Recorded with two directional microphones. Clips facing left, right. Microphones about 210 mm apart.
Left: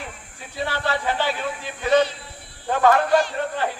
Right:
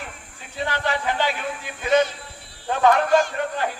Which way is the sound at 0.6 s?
15° right (ahead or behind).